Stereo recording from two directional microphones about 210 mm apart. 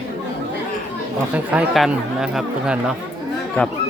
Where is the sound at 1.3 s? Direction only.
5° right (ahead or behind).